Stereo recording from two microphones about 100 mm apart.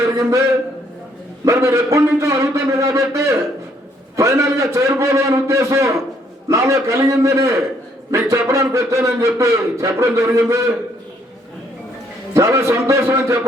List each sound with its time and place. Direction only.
0.0 s a sound: 30° right (ahead or behind)
1.5 s a man's voice: 30° right (ahead or behind)
12.3 s a man's voice: 30° right (ahead or behind)